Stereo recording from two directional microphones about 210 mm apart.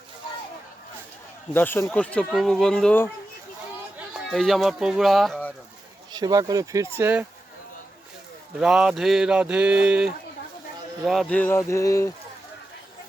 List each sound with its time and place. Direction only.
1.5 s speech: 10° left (ahead or behind)
4.1 s speech: centre (ahead or behind)
6.1 s speech: 20° right (ahead or behind)
8.5 s speech: 5° right (ahead or behind); by 12.1 s 15° left (ahead or behind)